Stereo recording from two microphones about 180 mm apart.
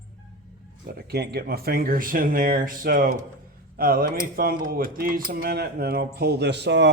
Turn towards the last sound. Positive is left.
turn(degrees=-75)  # may be behind; listen again after turning